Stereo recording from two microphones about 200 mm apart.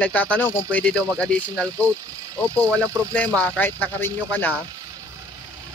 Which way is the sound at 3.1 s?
5° left (ahead or behind).